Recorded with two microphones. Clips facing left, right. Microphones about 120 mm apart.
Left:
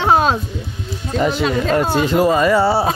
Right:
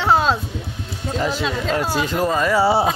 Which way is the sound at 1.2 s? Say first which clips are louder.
Left 6 dB; centre (ahead or behind).